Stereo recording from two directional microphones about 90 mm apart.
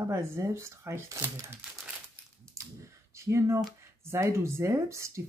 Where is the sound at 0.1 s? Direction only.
30° right (ahead or behind).